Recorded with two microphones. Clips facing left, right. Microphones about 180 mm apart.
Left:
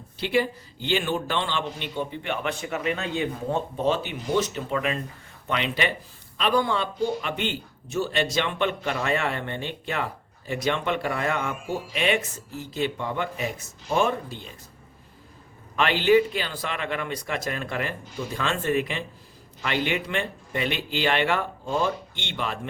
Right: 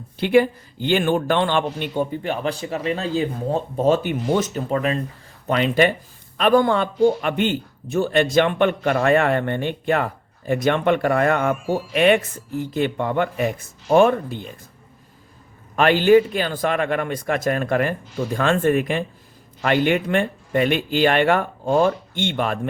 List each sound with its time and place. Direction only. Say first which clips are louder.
0.2 s a man's voice: right 8 dB; 50° right (ahead or behind)
15.7 s a man's voice: right 6 dB; 45° right (ahead or behind)